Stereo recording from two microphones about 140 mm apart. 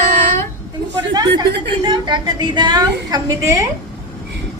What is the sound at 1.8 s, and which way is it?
A woman's voice, 30° right (ahead or behind).